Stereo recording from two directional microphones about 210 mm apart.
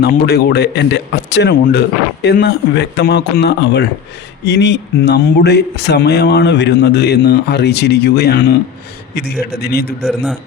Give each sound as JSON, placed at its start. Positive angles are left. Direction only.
{"t": 0.0, "sound": "speech", "side_deg": 50}